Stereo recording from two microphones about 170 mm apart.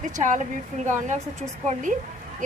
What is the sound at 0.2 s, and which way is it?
A woman's voice, 50° right (ahead or behind).